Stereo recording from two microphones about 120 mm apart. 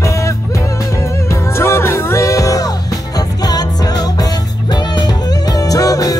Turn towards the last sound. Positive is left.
turn(degrees=30)  # may be behind; listen again after turning